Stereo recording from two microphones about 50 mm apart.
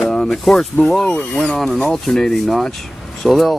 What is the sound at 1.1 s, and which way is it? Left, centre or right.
Speech, left.